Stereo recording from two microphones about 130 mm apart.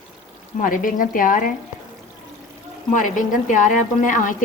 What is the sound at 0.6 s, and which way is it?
Speech, 90° left.